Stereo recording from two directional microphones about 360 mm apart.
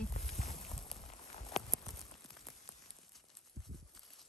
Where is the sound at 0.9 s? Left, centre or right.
Centre.